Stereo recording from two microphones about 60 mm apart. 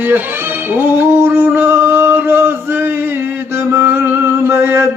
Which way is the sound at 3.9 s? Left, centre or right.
Right.